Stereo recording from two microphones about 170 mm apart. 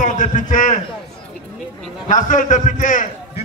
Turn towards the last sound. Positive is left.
turn(degrees=50)  # may be behind; listen again after turning